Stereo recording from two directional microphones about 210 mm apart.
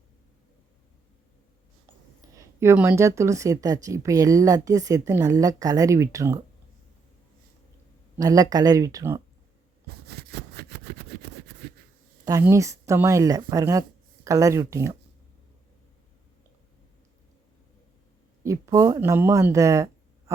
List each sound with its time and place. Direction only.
2.2 s speech: 15° right (ahead or behind)
8.2 s speech: 15° right (ahead or behind)
10.1 s vehicle: 50° right (ahead or behind)
12.2 s speech: 15° right (ahead or behind)
18.4 s speech: 15° right (ahead or behind)